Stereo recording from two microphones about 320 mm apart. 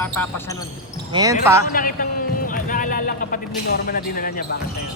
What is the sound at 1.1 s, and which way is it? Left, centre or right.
Speech, centre.